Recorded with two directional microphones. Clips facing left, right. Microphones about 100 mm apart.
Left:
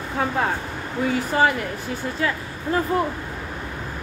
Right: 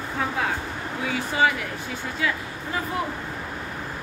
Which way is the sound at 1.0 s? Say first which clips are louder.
Left 3 dB; 50° left (ahead or behind).